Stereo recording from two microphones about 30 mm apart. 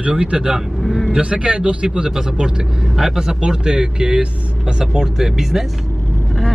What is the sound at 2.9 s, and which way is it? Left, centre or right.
A man's voice, centre.